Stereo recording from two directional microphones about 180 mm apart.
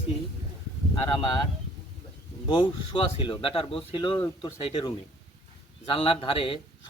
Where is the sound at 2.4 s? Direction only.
30° left (ahead or behind).